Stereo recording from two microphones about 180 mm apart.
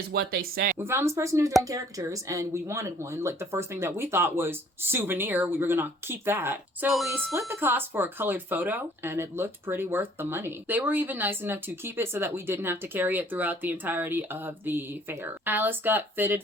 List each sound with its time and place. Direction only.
0.1 s speech: 60° right (ahead or behind)
0.8 s speech: 15° right (ahead or behind)
6.9 s speech: centre (ahead or behind)
7.3 s speech: 15° right (ahead or behind)